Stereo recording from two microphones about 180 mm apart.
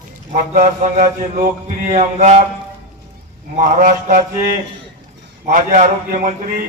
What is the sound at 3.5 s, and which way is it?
Speech, 45° right (ahead or behind).